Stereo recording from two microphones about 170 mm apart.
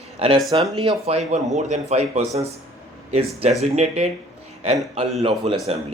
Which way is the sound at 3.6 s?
40° right (ahead or behind).